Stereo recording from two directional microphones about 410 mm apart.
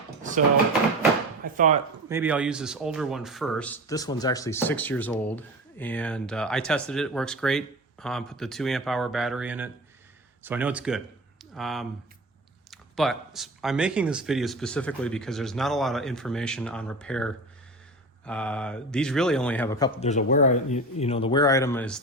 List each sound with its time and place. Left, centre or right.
0.2 s drawer open or close: centre
1.5 s speech: centre
2.0 s a man's voice: centre